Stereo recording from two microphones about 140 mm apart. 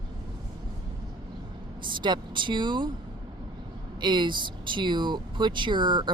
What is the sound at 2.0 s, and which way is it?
Speech, 35° right (ahead or behind).